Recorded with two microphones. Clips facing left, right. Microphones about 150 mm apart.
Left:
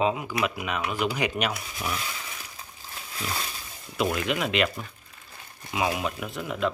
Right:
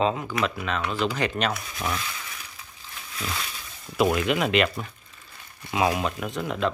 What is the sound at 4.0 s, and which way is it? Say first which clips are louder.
Speech: right 4 dB; 50° right (ahead or behind).